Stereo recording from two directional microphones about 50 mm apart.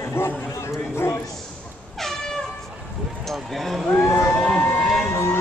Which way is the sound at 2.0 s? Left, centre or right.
Centre.